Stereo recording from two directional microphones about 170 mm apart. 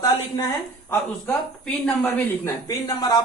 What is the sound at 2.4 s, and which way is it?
Speech, 20° left (ahead or behind).